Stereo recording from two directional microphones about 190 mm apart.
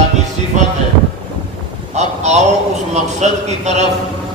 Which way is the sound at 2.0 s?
35° right (ahead or behind).